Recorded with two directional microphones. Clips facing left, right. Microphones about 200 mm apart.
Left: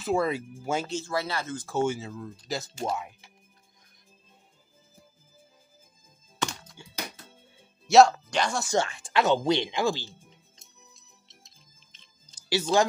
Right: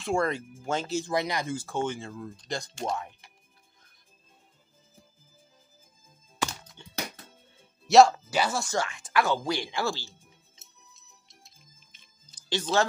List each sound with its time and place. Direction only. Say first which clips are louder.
0.0 s speech: left 1 dB; 5° left (ahead or behind)
0.8 s speech: right 2 dB; 15° right (ahead or behind)
1.7 s speech: left 3 dB; 5° left (ahead or behind)
6.4 s music: even; 5° right (ahead or behind)
7.8 s speech: even; centre (ahead or behind)
8.7 s speech: left 3 dB; 30° left (ahead or behind)
10.0 s music: left 4 dB; 5° right (ahead or behind)
12.4 s speech: left 3 dB; 10° left (ahead or behind)